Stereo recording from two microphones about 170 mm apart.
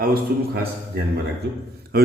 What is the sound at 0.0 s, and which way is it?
A man's voice, 65° right (ahead or behind).